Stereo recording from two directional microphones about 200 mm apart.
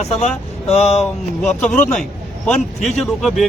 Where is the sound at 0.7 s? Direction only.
30° left (ahead or behind).